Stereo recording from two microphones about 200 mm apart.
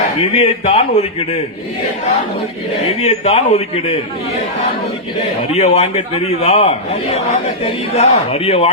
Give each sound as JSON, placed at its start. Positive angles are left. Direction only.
{"t": 0.2, "sound": "a man's voice", "side_deg": 30}
{"t": 3.0, "sound": "a man's voice", "side_deg": 35}
{"t": 5.5, "sound": "a man's voice", "side_deg": 35}